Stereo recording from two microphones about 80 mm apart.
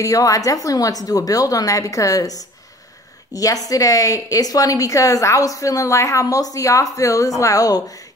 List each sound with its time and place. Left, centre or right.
0.0 s a woman's voice: left